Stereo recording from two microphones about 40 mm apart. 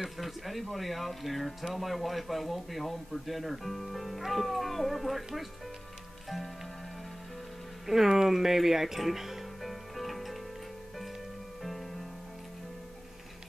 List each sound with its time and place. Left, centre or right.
0.0 s speech: centre
7.8 s speech: centre
9.6 s music: centre